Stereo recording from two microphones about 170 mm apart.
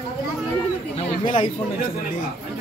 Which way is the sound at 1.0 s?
30° left (ahead or behind).